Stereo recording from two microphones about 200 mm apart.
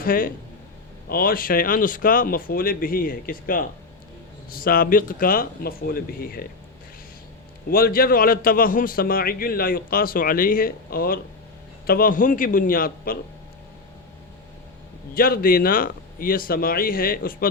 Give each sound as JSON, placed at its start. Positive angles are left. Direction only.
{"t": 0.0, "sound": "a man's voice", "side_deg": 45}
{"t": 7.7, "sound": "a man's voice", "side_deg": 50}
{"t": 15.1, "sound": "a man's voice", "side_deg": 45}